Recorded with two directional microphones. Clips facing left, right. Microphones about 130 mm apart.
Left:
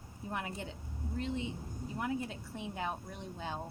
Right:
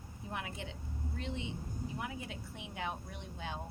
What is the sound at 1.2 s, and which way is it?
Speech, 40° left (ahead or behind).